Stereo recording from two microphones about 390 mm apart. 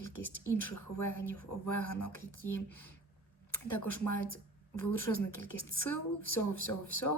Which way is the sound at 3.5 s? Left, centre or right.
Left.